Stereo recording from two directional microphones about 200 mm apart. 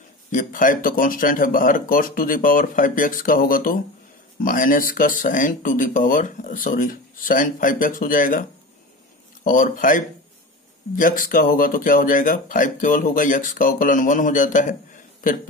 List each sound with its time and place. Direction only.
0.3 s speech: 40° left (ahead or behind)